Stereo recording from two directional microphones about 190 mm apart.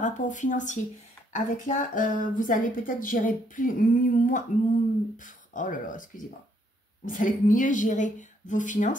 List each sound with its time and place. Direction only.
0.0 s a woman's voice: 40° left (ahead or behind)